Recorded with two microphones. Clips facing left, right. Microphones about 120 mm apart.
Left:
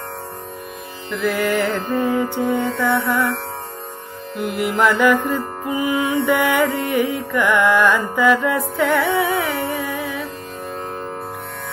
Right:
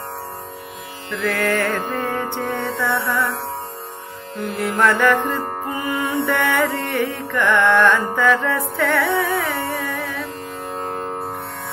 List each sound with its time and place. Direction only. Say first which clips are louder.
1.2 s music: left 1 dB; 5° left (ahead or behind)
1.7 s music: left 3 dB; 15° left (ahead or behind)
4.4 s music: left 1 dB; 15° left (ahead or behind)